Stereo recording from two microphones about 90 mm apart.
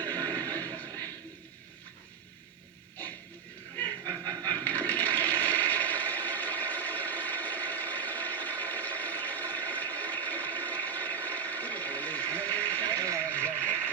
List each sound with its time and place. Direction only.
0.0 s neigh: 20° left (ahead or behind)
4.0 s toilet flush: 20° left (ahead or behind)
13.1 s a sound: 20° left (ahead or behind)